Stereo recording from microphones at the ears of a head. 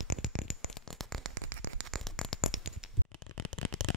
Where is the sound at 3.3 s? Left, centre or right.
Left.